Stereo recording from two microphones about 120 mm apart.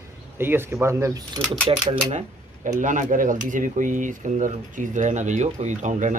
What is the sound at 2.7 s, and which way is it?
Speech, 90° right.